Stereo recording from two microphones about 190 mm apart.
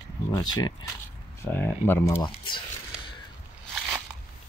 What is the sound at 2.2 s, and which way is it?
Speech, 25° left (ahead or behind).